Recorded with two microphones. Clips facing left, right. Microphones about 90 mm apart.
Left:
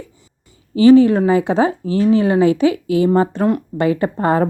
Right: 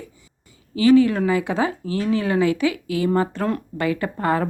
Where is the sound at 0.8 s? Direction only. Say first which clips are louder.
Left 6 dB; 30° left (ahead or behind).